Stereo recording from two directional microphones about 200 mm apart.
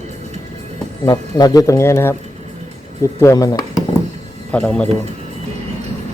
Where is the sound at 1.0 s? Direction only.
20° left (ahead or behind).